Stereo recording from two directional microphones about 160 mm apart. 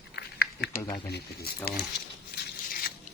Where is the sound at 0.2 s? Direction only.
80° left.